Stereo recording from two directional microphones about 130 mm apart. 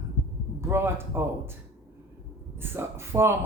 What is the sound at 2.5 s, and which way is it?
Speech, 20° right (ahead or behind).